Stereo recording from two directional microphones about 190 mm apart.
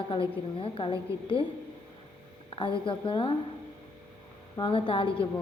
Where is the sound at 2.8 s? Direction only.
25° left (ahead or behind).